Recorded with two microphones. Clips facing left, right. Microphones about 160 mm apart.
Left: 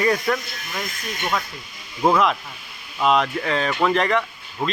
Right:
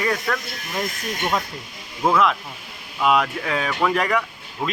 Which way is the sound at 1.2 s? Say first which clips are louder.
Right 1 dB; 15° right (ahead or behind).